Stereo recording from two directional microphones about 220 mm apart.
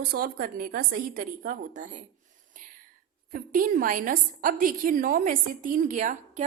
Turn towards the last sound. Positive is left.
turn(degrees=-35)  # may be behind; listen again after turning